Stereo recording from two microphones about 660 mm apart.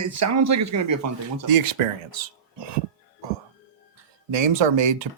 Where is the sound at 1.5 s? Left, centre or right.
Right.